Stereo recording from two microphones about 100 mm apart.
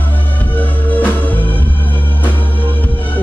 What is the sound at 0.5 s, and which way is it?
Music, 15° left (ahead or behind).